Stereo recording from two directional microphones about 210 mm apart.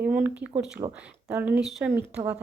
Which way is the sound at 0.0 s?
5° right (ahead or behind).